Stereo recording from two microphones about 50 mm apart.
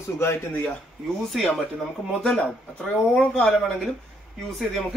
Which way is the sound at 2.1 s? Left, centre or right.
Centre.